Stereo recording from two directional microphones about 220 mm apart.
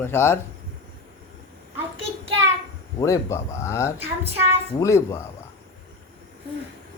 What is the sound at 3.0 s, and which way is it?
Speech, 15° left (ahead or behind).